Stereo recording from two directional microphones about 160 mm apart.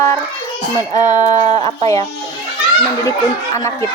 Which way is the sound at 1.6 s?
20° left (ahead or behind).